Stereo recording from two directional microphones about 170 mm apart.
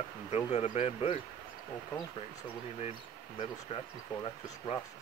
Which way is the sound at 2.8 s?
35° left (ahead or behind).